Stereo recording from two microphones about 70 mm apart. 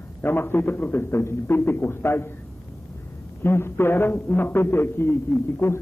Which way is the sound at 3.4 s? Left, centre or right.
Left.